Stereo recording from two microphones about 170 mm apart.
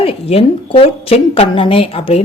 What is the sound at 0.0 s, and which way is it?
A woman's voice, 35° left (ahead or behind).